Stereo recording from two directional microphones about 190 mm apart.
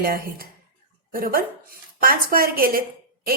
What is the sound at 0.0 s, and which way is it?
A woman's voice, 50° right (ahead or behind).